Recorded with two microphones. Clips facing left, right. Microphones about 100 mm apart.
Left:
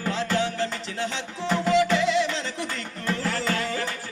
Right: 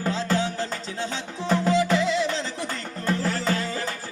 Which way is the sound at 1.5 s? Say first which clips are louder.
Even; 35° right (ahead or behind).